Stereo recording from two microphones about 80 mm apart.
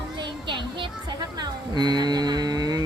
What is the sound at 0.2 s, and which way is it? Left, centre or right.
Music, right.